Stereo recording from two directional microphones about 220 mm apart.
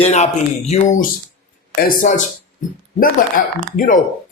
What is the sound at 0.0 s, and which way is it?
Speech, 30° left (ahead or behind).